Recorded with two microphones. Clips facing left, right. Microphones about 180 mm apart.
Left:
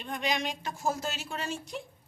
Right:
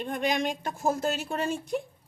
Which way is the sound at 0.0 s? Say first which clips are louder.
Right 4 dB; 50° right (ahead or behind).